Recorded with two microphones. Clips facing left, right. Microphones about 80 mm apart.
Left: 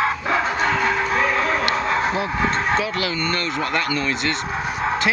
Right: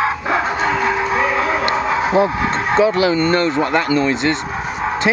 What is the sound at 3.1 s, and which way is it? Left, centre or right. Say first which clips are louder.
Speech: right 9 dB; right.